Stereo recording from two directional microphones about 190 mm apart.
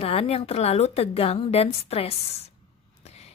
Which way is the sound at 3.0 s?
35° left (ahead or behind).